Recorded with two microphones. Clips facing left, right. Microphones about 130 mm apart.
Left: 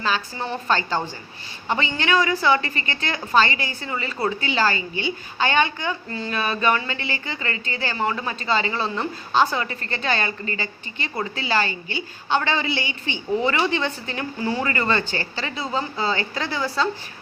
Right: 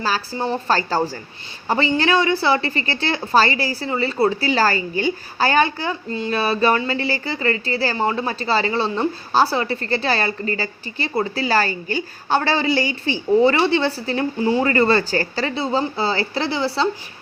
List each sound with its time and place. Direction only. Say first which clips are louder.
0.0 s a woman's voice: right 3 dB; 35° right (ahead or behind)